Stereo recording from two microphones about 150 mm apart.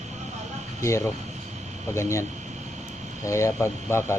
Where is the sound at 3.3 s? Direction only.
20° left (ahead or behind).